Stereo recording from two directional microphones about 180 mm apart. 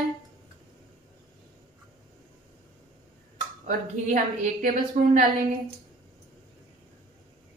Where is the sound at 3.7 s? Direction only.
45° right (ahead or behind).